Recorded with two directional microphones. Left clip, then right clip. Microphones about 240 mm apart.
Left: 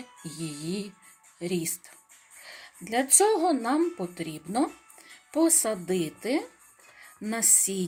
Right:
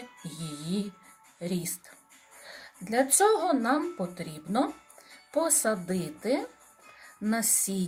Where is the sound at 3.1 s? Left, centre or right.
Left.